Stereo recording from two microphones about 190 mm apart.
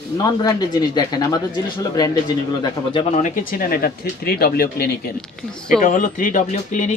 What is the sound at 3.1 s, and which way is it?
Speech, 45° left (ahead or behind).